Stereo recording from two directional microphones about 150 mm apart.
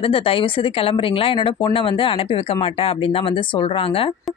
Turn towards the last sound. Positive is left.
turn(degrees=35)  # may be behind; listen again after turning